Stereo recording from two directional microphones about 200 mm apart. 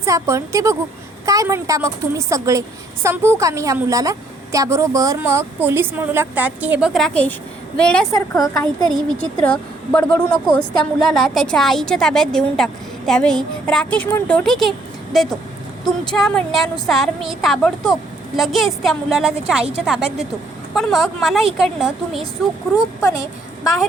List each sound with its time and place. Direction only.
0.0 s a woman's voice: 15° right (ahead or behind); by 8.0 s 5° left (ahead or behind)
8.1 s a woman's voice: 15° left (ahead or behind)
8.8 s a woman's voice: 5° left (ahead or behind)
23.0 s a woman's voice: 15° left (ahead or behind)